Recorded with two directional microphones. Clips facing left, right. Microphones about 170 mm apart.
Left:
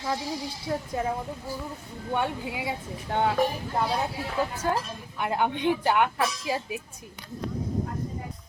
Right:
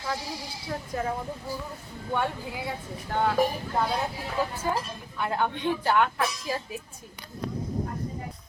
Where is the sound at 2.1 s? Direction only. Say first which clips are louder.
Left 1 dB; 15° left (ahead or behind).